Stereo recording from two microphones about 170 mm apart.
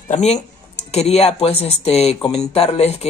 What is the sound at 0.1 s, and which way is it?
Speech, 40° left (ahead or behind).